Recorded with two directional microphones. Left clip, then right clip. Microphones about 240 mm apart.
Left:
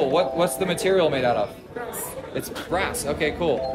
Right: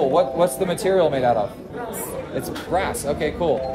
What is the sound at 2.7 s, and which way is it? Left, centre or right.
Speech, centre.